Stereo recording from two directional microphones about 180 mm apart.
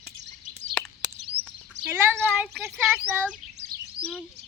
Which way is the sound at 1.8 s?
40° right (ahead or behind).